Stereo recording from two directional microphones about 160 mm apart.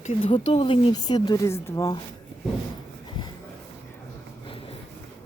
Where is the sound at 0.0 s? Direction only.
35° left (ahead or behind); by 2.0 s 20° left (ahead or behind).